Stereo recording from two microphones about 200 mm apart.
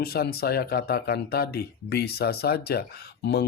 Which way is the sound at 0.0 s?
50° left (ahead or behind).